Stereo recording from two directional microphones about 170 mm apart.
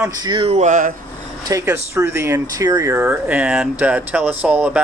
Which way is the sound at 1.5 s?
15° right (ahead or behind).